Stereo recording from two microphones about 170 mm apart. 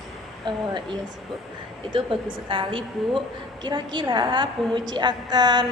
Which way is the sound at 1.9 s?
30° right (ahead or behind).